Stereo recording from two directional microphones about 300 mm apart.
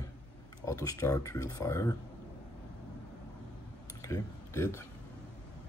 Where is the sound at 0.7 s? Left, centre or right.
Centre.